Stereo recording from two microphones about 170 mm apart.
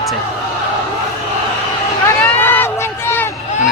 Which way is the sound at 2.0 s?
10° left (ahead or behind).